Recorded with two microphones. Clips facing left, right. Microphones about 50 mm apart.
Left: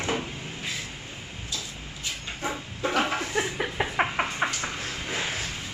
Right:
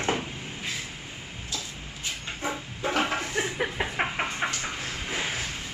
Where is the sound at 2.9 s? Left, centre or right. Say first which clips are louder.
Left 1 dB; centre.